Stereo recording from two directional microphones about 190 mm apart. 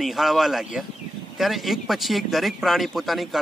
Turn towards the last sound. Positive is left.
turn(degrees=0)  # may be behind; listen again after turning